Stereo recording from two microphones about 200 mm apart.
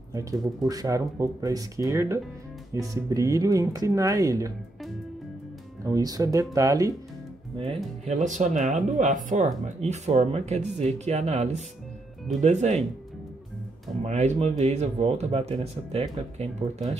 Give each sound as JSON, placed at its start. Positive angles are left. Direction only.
{"t": 0.1, "sound": "speech", "side_deg": -15}
{"t": 5.9, "sound": "speech", "side_deg": -20}
{"t": 7.5, "sound": "speech", "side_deg": -30}
{"t": 14.0, "sound": "speech", "side_deg": -35}